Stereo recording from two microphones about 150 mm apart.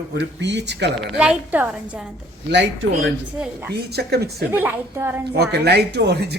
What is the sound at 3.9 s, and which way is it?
Speech, 90° right.